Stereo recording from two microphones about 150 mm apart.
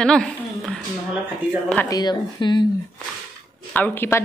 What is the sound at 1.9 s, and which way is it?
Speech, 30° left (ahead or behind).